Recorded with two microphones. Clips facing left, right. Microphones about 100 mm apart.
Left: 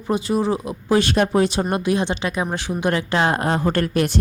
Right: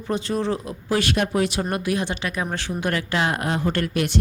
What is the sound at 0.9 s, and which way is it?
A woman's voice, 30° left (ahead or behind).